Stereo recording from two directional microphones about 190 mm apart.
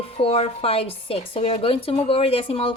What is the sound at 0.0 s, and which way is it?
A woman's voice, 30° left (ahead or behind).